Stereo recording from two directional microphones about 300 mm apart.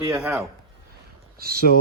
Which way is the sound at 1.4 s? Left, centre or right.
Right.